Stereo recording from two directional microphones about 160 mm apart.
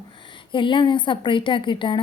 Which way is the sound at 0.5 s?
30° left (ahead or behind).